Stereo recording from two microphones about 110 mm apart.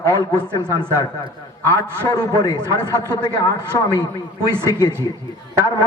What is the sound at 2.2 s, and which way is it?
A man's voice, 35° left (ahead or behind).